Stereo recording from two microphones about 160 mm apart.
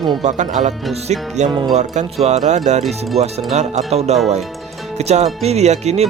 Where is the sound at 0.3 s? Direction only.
50° right (ahead or behind).